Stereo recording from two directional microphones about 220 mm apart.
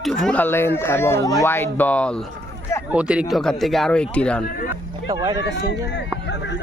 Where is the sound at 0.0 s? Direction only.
Centre (ahead or behind).